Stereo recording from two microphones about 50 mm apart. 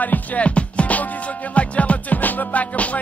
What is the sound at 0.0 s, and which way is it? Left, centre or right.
Music, left.